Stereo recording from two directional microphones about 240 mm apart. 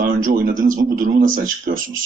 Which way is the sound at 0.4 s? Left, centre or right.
Right.